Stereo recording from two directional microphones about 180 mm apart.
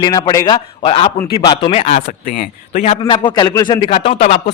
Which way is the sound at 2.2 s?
50° left (ahead or behind).